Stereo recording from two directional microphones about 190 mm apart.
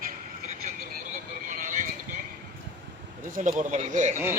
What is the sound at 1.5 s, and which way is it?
Vehicle, 45° right (ahead or behind).